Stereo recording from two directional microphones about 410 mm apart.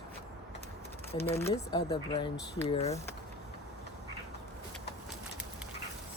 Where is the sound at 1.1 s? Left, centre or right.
Centre.